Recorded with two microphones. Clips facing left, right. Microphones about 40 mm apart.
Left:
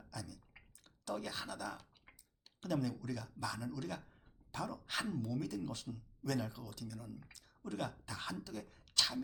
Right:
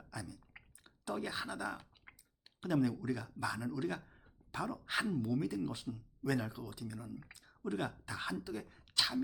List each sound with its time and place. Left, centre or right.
0.1 s clicking: centre
2.6 s speech: centre